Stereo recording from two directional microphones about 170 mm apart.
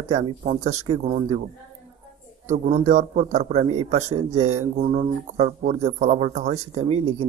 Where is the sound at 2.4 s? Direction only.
40° right (ahead or behind).